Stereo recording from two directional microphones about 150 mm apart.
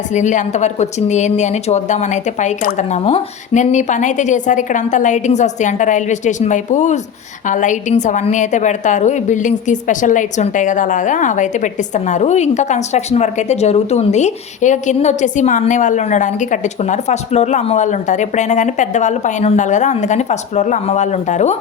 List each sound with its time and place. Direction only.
0.1 s a woman's voice: 55° left (ahead or behind)